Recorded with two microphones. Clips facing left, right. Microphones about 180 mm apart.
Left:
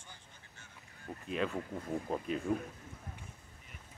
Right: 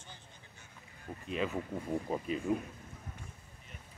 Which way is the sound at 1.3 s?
Centre (ahead or behind).